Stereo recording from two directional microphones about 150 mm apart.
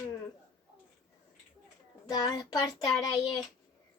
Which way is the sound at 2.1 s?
25° left (ahead or behind).